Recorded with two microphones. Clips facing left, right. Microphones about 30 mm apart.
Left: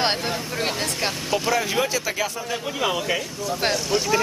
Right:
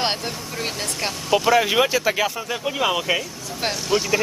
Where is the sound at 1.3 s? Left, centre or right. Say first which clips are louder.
Right 6 dB; centre.